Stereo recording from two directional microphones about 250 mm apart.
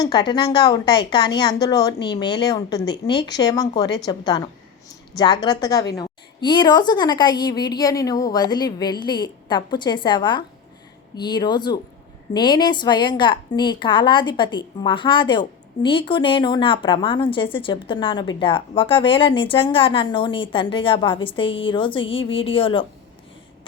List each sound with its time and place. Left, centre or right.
0.0 s a woman's voice: centre